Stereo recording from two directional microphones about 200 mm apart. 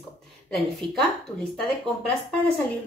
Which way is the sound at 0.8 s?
25° right (ahead or behind).